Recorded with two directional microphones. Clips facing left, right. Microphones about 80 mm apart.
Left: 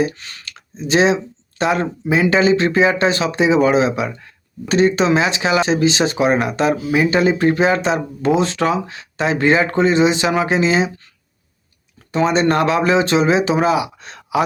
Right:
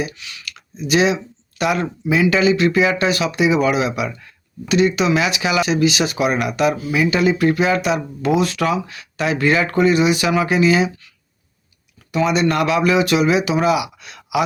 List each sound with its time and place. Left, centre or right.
0.0 s speech: left
12.1 s speech: left